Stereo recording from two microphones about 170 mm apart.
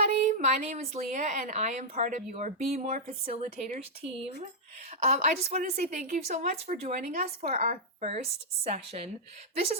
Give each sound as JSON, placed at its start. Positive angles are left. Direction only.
{"t": 0.0, "sound": "a woman's voice", "side_deg": -45}
{"t": 4.9, "sound": "a woman's voice", "side_deg": -45}
{"t": 5.7, "sound": "a woman's voice", "side_deg": -55}